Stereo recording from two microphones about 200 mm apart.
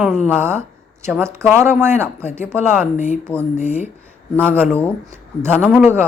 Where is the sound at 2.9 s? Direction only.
35° left (ahead or behind).